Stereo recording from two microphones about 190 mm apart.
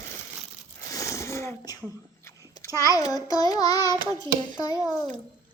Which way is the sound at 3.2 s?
20° left (ahead or behind).